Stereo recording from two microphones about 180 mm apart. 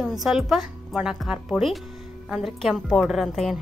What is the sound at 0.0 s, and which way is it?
Speech, centre (ahead or behind).